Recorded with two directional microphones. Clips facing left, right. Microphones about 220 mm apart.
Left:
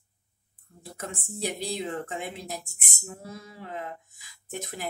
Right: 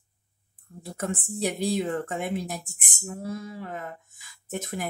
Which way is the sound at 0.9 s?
50° right (ahead or behind).